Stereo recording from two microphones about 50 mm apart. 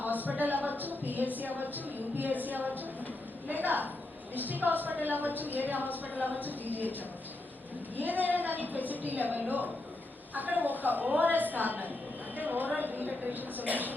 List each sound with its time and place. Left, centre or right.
0.2 s a woman's voice: right
7.9 s a woman's voice: right